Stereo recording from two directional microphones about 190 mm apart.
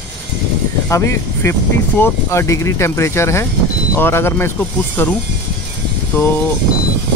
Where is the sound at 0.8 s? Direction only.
15° left (ahead or behind).